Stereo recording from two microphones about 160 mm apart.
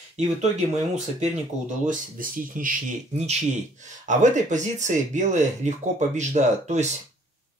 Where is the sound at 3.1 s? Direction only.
45° right (ahead or behind).